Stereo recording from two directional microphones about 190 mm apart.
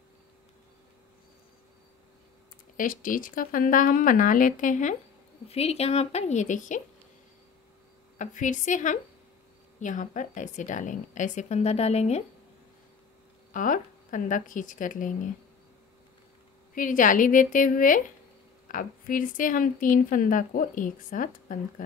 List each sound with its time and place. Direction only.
2.8 s a woman's voice: 45° left (ahead or behind)
8.2 s a woman's voice: 40° left (ahead or behind)
13.5 s a woman's voice: 45° left (ahead or behind)
16.7 s speech: 45° left (ahead or behind)